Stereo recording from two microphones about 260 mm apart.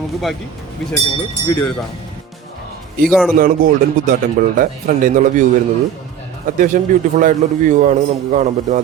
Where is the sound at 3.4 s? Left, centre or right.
Right.